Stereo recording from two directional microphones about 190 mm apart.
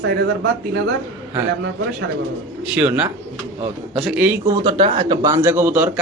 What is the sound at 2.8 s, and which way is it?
A man's voice, 10° right (ahead or behind).